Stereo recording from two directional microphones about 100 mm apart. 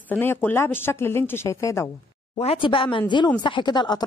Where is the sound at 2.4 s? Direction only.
70° left (ahead or behind); by 4.0 s 45° left (ahead or behind).